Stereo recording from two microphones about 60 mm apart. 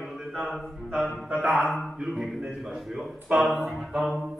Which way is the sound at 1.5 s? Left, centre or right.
Centre.